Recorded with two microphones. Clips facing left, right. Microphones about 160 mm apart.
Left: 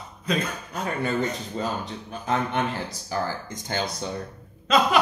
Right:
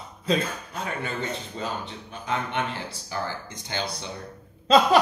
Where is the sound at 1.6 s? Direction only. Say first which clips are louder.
Left 5 dB; 40° left (ahead or behind).